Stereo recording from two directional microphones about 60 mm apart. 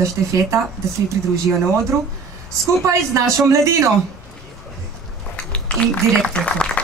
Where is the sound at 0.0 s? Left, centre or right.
Right.